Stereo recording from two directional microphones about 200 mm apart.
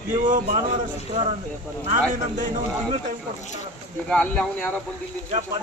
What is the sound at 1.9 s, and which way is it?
Speech, 40° right (ahead or behind).